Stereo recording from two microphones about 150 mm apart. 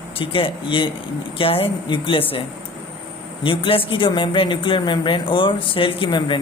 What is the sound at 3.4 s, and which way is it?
Speech, 35° left (ahead or behind).